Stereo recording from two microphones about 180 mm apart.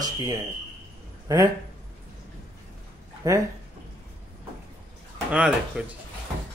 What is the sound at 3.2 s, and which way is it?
Speech, 20° right (ahead or behind).